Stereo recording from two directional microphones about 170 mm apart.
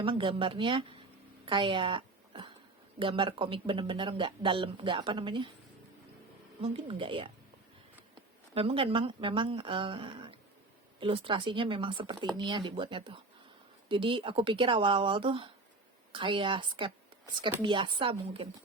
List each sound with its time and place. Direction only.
0.0 s a woman's voice: 30° right (ahead or behind)
6.6 s speech: 35° right (ahead or behind)
8.5 s speech: 35° right (ahead or behind)